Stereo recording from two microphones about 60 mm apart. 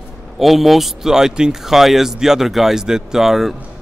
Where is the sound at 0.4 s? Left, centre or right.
Centre.